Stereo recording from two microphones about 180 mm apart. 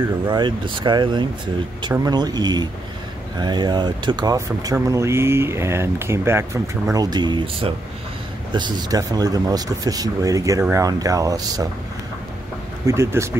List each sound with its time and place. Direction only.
0.3 s speech: 25° right (ahead or behind)
12.8 s speech: 15° right (ahead or behind)